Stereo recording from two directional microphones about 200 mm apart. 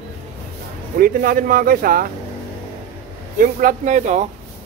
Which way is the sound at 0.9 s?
45° right (ahead or behind).